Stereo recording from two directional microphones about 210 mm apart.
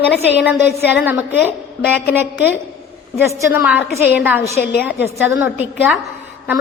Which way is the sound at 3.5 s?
10° right (ahead or behind).